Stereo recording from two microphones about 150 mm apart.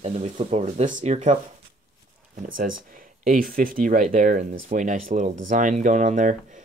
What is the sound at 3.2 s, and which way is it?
Speech, 70° right (ahead or behind).